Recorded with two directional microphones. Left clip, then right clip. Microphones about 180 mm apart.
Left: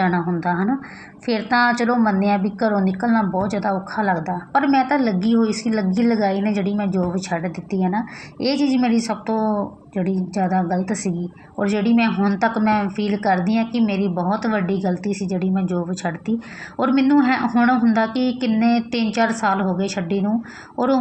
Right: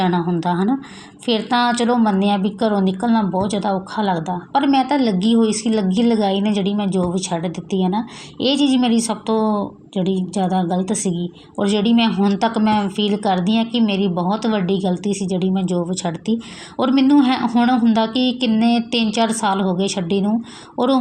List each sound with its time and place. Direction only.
0.0 s a woman's voice: 25° right (ahead or behind)